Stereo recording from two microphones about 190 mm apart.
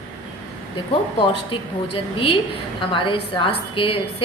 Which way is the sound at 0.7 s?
25° left (ahead or behind).